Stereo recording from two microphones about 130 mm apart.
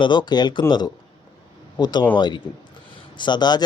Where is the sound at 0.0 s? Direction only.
35° left (ahead or behind).